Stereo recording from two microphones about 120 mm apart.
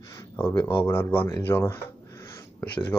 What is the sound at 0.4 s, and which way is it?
Speech, 20° left (ahead or behind).